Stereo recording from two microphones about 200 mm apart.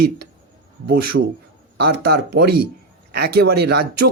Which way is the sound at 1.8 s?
50° right (ahead or behind).